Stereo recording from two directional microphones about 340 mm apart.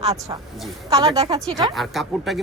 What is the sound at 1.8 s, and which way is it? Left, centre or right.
Speech, centre.